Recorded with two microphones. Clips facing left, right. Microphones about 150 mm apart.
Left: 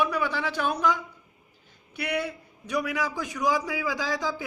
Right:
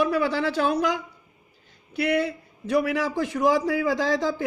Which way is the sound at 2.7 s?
55° right (ahead or behind).